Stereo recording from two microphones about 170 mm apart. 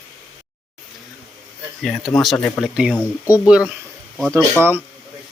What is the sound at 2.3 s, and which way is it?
Speech, 10° left (ahead or behind).